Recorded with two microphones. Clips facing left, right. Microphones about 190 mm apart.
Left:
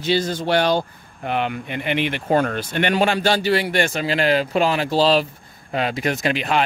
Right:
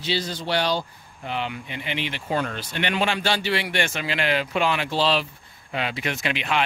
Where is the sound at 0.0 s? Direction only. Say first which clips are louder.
Left 7 dB; 50° left (ahead or behind).